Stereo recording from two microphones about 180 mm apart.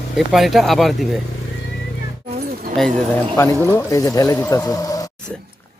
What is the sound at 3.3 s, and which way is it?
Speech, 15° left (ahead or behind).